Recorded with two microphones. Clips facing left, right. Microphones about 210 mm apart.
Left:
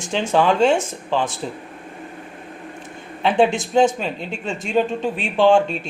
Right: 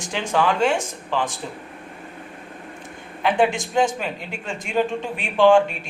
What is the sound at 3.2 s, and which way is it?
A man's voice, 25° left (ahead or behind).